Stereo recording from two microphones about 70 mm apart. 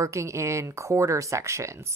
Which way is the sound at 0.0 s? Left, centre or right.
Right.